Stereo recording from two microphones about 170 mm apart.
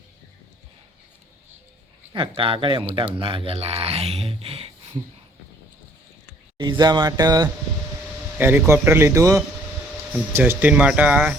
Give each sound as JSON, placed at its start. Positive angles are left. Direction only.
{"t": 2.1, "sound": "speech", "side_deg": -30}
{"t": 6.6, "sound": "speech", "side_deg": -25}
{"t": 8.4, "sound": "a man's voice", "side_deg": -10}